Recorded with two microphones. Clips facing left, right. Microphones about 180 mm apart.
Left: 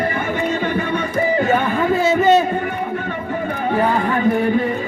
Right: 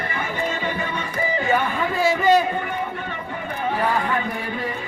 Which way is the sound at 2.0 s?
25° left (ahead or behind).